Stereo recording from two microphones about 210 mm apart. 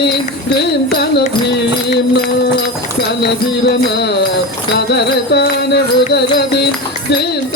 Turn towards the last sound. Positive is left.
turn(degrees=50)  # may be behind; listen again after turning